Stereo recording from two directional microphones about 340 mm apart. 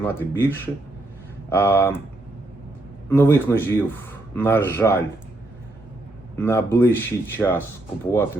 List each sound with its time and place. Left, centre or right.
0.0 s speech: centre
3.1 s speech: centre
6.4 s speech: centre